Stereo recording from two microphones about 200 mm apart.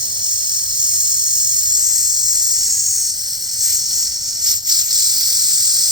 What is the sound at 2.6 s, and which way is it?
Snake, centre (ahead or behind).